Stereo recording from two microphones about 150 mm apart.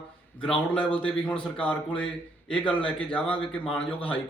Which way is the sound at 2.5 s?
35° left (ahead or behind).